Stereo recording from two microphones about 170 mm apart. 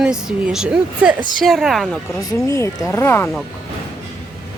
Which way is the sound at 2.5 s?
15° left (ahead or behind).